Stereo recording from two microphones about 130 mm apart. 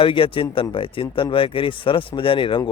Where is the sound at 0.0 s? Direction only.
40° left (ahead or behind).